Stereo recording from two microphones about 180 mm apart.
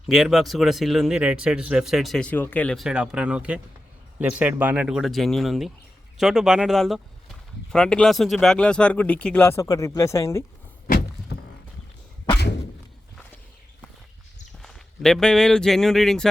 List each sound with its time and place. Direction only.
0.1 s speech: centre (ahead or behind); by 10.4 s 15° left (ahead or behind)
10.8 s a sound: 55° left (ahead or behind)
14.6 s speech: 5° left (ahead or behind)